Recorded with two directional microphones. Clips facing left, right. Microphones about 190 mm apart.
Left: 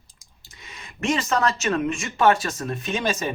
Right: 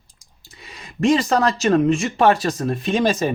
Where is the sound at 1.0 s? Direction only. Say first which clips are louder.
Right 6 dB; 35° right (ahead or behind).